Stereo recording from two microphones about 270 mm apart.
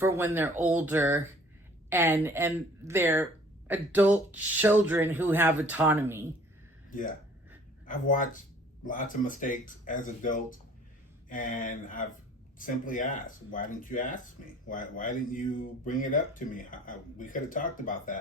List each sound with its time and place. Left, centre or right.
0.3 s speech: centre
7.9 s speech: left